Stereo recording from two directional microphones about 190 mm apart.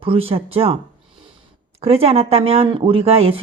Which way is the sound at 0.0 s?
30° right (ahead or behind).